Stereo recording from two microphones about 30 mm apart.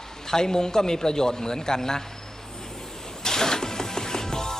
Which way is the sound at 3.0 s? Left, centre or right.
Centre.